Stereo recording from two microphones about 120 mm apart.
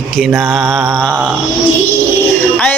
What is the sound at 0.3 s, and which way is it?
Speech, centre (ahead or behind).